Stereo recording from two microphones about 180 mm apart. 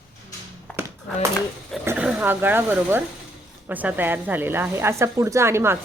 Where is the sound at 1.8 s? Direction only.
10° right (ahead or behind).